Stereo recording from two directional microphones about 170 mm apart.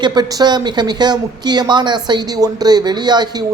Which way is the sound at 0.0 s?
25° right (ahead or behind).